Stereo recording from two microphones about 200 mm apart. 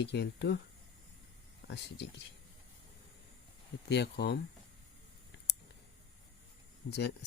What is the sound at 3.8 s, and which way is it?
Speech, 55° left (ahead or behind).